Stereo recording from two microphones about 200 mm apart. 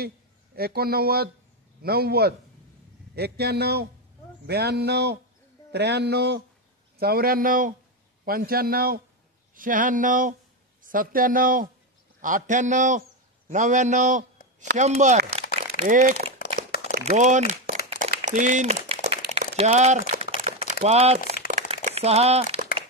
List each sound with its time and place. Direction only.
0.6 s a man's voice: 50° right (ahead or behind)
16.3 s crumpling: 45° left (ahead or behind)
17.0 s speech: 35° right (ahead or behind)
17.8 s a sound: 35° right (ahead or behind)
21.5 s crumpling: 35° right (ahead or behind)